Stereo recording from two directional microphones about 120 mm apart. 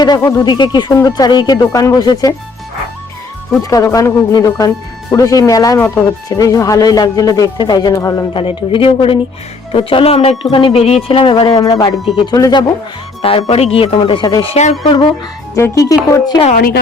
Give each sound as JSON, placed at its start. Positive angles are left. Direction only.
{"t": 0.0, "sound": "speech", "side_deg": 30}
{"t": 3.6, "sound": "speech", "side_deg": 30}
{"t": 8.3, "sound": "speech", "side_deg": 45}
{"t": 13.2, "sound": "speech", "side_deg": 50}
{"t": 14.4, "sound": "speech", "side_deg": 60}
{"t": 14.8, "sound": "speech", "side_deg": 40}
{"t": 15.5, "sound": "speech", "side_deg": 25}